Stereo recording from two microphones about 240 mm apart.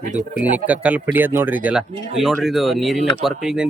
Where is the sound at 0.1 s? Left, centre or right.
Right.